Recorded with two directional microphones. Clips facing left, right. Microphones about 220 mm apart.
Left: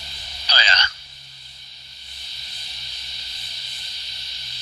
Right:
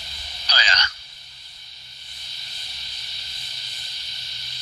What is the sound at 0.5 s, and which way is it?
Telephone, 30° left (ahead or behind).